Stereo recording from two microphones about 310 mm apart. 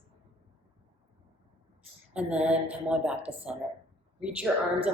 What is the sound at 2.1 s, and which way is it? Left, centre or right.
Speech, centre.